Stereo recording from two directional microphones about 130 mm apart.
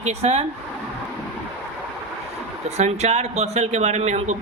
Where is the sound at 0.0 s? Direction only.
55° right (ahead or behind).